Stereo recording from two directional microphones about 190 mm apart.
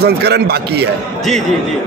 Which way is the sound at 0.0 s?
60° right (ahead or behind).